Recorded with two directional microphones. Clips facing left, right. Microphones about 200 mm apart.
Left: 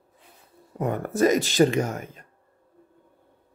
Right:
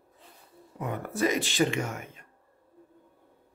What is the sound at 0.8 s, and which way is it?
Speech, 45° left (ahead or behind).